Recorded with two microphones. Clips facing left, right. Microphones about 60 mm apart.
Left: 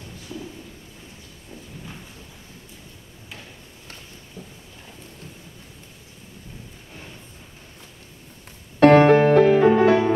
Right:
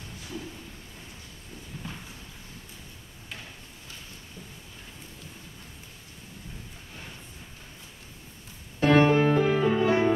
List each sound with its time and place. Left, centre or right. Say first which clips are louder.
8.7 s music: left 8 dB; left